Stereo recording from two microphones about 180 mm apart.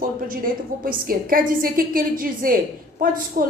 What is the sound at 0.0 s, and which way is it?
A woman's voice, 50° right (ahead or behind).